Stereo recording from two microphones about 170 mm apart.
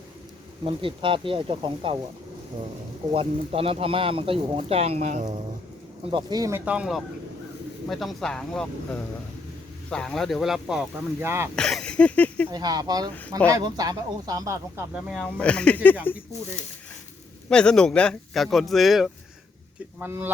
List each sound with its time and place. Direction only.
0.6 s speech: 30° right (ahead or behind)
3.1 s speech: 35° right (ahead or behind)
6.1 s speech: 25° right (ahead or behind)
6.7 s speech: 5° right (ahead or behind)
12.5 s speech: 25° right (ahead or behind)
14.9 s speech: 5° left (ahead or behind)
17.5 s speech: 5° left (ahead or behind)
20.0 s speech: 10° right (ahead or behind)